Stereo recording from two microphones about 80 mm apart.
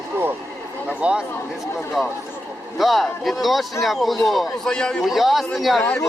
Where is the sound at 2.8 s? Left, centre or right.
Centre.